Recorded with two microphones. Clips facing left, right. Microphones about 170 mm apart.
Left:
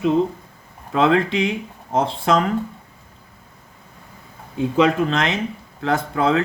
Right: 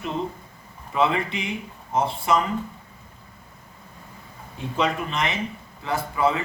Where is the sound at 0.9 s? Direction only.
90° left.